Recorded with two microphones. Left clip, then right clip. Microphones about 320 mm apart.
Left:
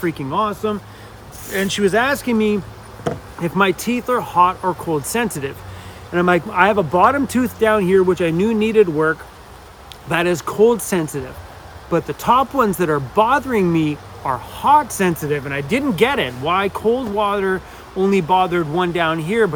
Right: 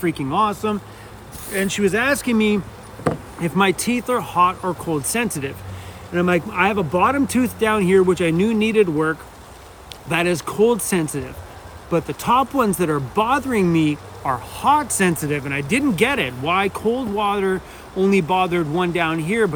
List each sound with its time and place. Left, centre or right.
0.0 s speech: centre